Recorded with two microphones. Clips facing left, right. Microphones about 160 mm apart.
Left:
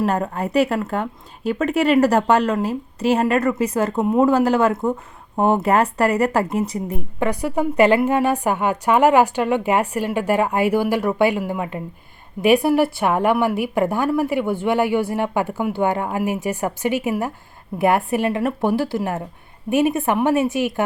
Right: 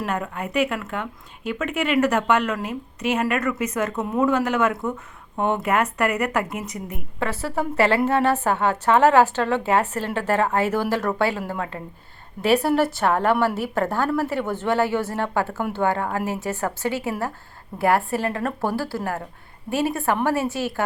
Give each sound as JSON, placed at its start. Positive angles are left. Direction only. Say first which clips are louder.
{"t": 0.0, "sound": "a woman's voice", "louder": "left 6 dB", "side_deg": 35}
{"t": 7.2, "sound": "a woman's voice", "louder": "left 4 dB", "side_deg": 15}